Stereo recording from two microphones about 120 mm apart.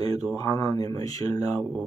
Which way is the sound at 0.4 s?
30° left (ahead or behind).